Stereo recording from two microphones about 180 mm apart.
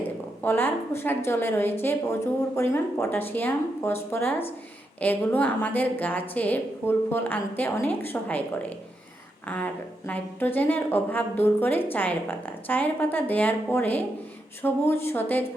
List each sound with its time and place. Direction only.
0.4 s a woman's voice: 10° left (ahead or behind)